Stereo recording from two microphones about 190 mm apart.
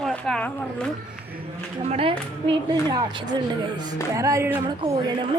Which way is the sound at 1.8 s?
30° right (ahead or behind).